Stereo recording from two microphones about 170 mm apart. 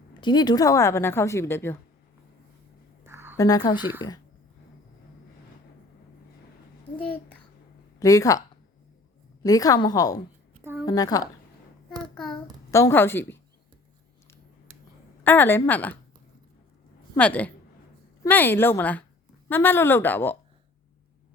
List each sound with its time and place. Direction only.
0.2 s a woman's voice: 25° left (ahead or behind)
3.0 s a sound: 15° right (ahead or behind)
3.3 s a woman's voice: 20° left (ahead or behind)
3.8 s speech: 10° right (ahead or behind)
7.0 s a child's voice: 10° left (ahead or behind)
7.9 s a woman's voice: 20° left (ahead or behind)
12.1 s child singing: 5° left (ahead or behind)
12.7 s a woman's voice: 15° left (ahead or behind)
15.2 s a woman's voice: 10° left (ahead or behind)
17.2 s a woman's voice: 5° left (ahead or behind)